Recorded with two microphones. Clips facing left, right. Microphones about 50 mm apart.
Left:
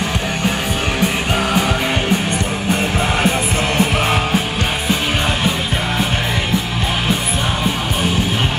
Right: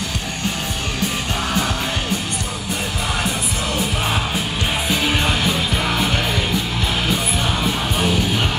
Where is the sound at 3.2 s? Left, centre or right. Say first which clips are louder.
Left 6 dB; left.